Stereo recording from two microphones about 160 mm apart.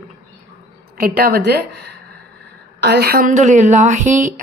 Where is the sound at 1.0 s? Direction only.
65° right (ahead or behind).